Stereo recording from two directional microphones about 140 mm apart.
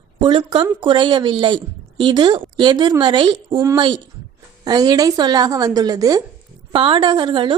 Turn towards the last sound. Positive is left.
turn(degrees=-35)  # may be behind; listen again after turning